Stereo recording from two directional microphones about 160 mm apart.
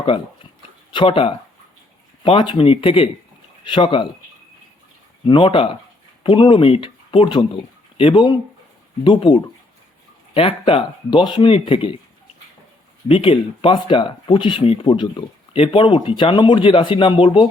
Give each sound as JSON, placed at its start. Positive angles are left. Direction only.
{"t": 0.9, "sound": "speech", "side_deg": 35}
{"t": 5.2, "sound": "speech", "side_deg": 30}
{"t": 13.1, "sound": "speech", "side_deg": 35}